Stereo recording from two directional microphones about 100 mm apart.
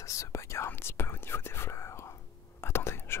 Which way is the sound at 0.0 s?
30° left (ahead or behind).